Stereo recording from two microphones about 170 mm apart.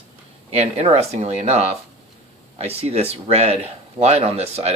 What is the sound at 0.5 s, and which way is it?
Speech, 40° right (ahead or behind).